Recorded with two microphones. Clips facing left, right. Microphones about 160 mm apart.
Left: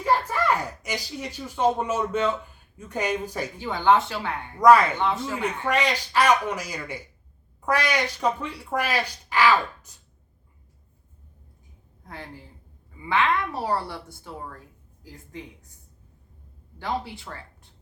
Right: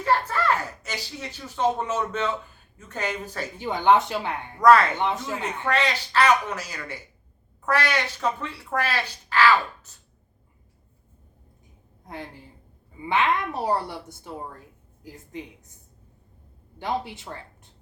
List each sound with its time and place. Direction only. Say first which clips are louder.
0.0 s speech: even; 10° left (ahead or behind)
3.6 s a woman's voice: right 1 dB; 20° right (ahead or behind)
4.6 s speech: left 1 dB; 10° left (ahead or behind)
4.9 s a woman's voice: left 1 dB; 20° right (ahead or behind)
5.4 s speech: even; 10° left (ahead or behind)
13.0 s a woman's voice: even; 20° right (ahead or behind)
16.7 s a woman's voice: right 1 dB; 20° right (ahead or behind)